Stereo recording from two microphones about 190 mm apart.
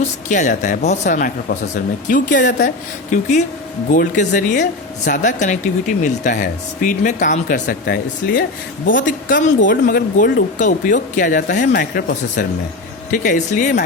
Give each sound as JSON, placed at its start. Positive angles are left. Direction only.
{"t": 0.0, "sound": "speech", "side_deg": 40}